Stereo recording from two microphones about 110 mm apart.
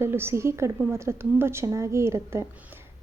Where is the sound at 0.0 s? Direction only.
20° right (ahead or behind).